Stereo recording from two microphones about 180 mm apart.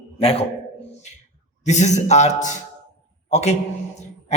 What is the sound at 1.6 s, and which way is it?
Speech, 40° left (ahead or behind).